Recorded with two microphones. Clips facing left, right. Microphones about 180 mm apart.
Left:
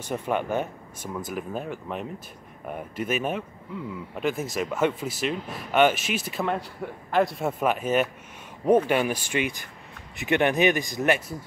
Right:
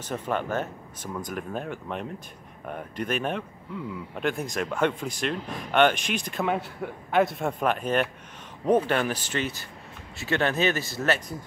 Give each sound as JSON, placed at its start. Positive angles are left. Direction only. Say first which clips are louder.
{"t": 0.1, "sound": "speech", "louder": "left 2 dB", "side_deg": 10}